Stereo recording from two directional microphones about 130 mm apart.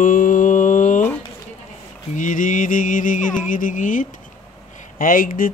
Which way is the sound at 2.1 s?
85° left.